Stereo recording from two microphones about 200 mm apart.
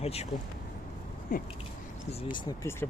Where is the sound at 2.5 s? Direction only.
15° left (ahead or behind).